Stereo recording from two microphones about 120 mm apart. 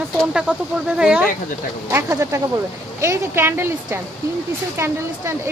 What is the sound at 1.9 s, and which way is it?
Speech, 25° right (ahead or behind).